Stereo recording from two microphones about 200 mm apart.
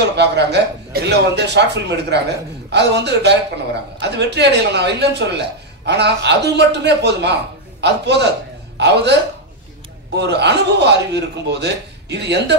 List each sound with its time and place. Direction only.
0.0 s a man's voice: 55° right (ahead or behind)
10.1 s a man's voice: 60° right (ahead or behind)